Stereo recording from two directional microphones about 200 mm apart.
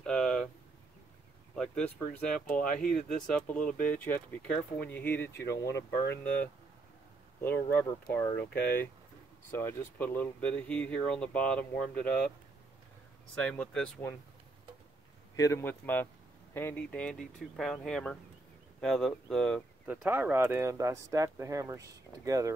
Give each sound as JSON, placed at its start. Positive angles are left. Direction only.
{"t": 0.0, "sound": "a sound", "side_deg": 5}
{"t": 1.5, "sound": "speech", "side_deg": 5}
{"t": 2.9, "sound": "speech", "side_deg": 40}
{"t": 3.3, "sound": "speech", "side_deg": 5}
{"t": 3.6, "sound": "speech", "side_deg": 40}
{"t": 3.9, "sound": "speech", "side_deg": 10}
{"t": 13.3, "sound": "speech", "side_deg": 5}
{"t": 15.3, "sound": "speech", "side_deg": 15}
{"t": 19.9, "sound": "speech", "side_deg": -10}